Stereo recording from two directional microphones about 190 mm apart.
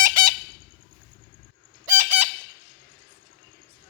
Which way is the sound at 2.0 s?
35° right (ahead or behind).